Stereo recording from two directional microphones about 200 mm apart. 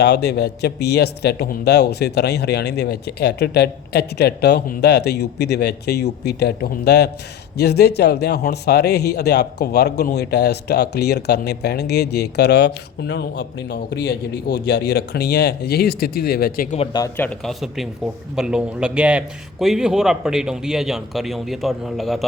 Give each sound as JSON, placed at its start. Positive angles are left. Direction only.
{"t": 0.0, "sound": "speech", "side_deg": 55}
{"t": 16.7, "sound": "speech", "side_deg": 30}
{"t": 17.0, "sound": "a man's voice", "side_deg": 10}